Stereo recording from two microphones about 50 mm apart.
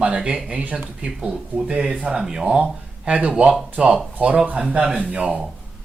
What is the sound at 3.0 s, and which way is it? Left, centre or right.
Speech, right.